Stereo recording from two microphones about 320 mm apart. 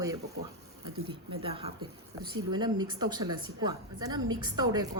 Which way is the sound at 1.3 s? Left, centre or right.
Centre.